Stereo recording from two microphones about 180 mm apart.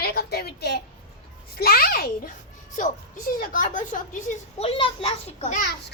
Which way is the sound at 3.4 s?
50° left (ahead or behind).